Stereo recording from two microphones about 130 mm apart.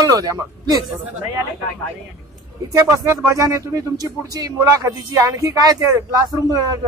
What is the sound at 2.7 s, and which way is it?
A man's voice, 20° right (ahead or behind).